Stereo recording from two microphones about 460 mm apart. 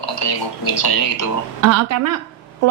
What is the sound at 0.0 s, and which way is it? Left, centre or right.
Speech, left.